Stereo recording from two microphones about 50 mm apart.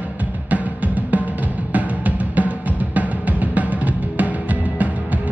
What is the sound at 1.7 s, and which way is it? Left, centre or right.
Music, right.